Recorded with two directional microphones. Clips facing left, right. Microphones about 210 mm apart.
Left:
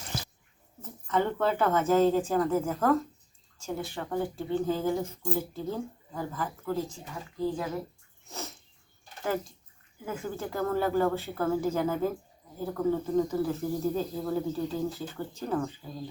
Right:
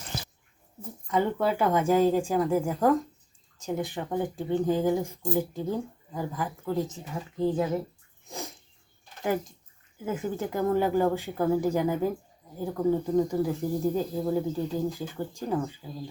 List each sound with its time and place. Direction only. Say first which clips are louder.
0.8 s speech: right 2 dB; 10° right (ahead or behind)
8.3 s sneeze: right 2 dB; 15° right (ahead or behind)
9.2 s speech: right 3 dB; 15° right (ahead or behind)
13.1 s speech: right 2 dB; 15° right (ahead or behind)